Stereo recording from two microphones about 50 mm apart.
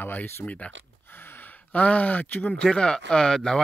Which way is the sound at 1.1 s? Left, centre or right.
Left.